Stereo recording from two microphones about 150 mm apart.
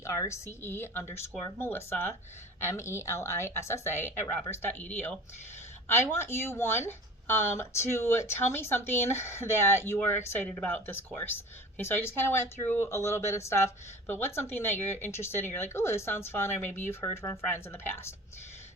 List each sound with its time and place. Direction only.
0.0 s speech: 20° left (ahead or behind)